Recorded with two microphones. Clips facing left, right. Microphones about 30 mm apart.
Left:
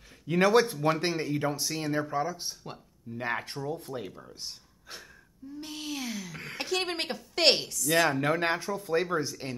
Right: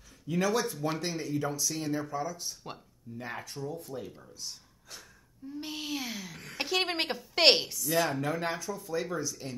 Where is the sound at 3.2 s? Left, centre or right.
Left.